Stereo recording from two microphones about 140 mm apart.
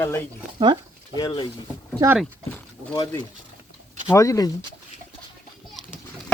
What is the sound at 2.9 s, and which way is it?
Speech, 35° left (ahead or behind).